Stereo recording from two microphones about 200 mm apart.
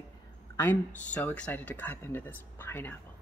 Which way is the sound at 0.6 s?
10° left (ahead or behind).